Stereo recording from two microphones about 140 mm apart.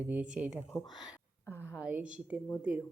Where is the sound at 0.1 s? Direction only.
10° right (ahead or behind).